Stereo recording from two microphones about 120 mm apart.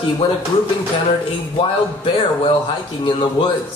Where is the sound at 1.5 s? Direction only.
45° left (ahead or behind).